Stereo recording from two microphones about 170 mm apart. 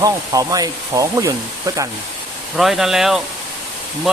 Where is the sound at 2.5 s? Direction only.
Centre (ahead or behind).